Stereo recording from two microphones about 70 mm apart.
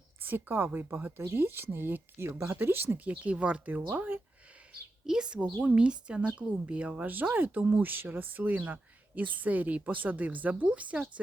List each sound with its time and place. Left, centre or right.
0.2 s a woman's voice: right
3.0 s speech: centre
3.9 s a woman's voice: right
5.0 s a woman's voice: centre